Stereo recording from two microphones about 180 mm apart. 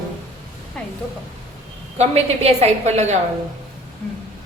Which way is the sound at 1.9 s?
35° right (ahead or behind).